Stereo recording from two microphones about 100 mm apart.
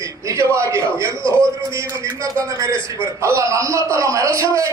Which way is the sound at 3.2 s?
30° right (ahead or behind).